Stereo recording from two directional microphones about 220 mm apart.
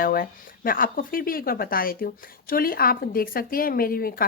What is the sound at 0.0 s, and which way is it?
Speech, 40° left (ahead or behind).